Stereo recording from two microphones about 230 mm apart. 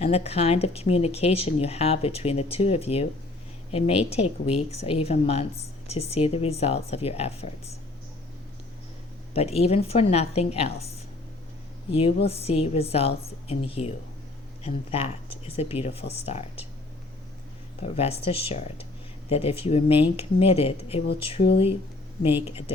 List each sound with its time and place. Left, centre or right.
0.0 s speech: left
9.3 s speech: left
17.8 s speech: left